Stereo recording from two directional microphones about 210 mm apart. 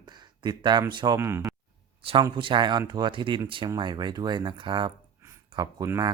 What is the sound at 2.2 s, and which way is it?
Speech, 20° right (ahead or behind).